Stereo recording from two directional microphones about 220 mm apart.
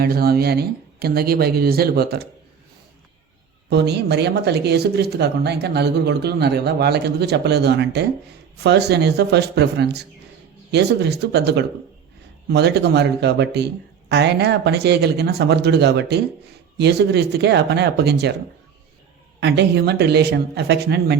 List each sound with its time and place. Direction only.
0.0 s speech: 45° right (ahead or behind)
3.7 s speech: 50° right (ahead or behind)
19.4 s speech: 50° right (ahead or behind)